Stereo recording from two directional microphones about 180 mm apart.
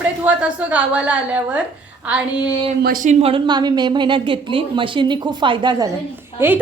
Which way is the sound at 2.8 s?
50° right (ahead or behind).